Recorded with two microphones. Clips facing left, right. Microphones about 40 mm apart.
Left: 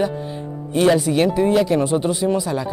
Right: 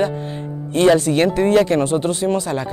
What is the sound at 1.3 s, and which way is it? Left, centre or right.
Speech, right.